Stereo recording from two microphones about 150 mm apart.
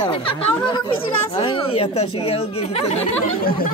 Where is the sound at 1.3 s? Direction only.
35° left (ahead or behind).